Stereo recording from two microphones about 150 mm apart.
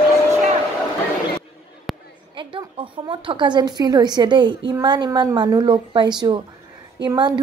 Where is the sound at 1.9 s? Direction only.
Centre (ahead or behind).